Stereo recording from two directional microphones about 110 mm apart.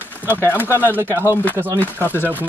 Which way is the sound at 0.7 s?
20° left (ahead or behind).